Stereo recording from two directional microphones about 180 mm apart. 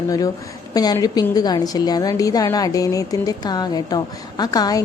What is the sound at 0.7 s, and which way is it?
A woman's voice, 20° left (ahead or behind).